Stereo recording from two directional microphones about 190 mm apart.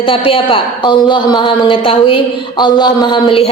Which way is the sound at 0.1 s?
30° left (ahead or behind).